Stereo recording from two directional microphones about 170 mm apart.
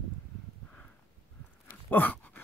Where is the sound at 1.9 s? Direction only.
10° left (ahead or behind).